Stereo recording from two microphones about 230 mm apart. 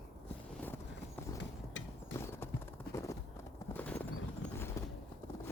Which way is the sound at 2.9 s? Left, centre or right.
Left.